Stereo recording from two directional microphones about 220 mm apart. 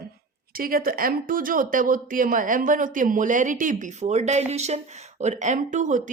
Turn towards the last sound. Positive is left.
turn(degrees=-35)  # may be behind; listen again after turning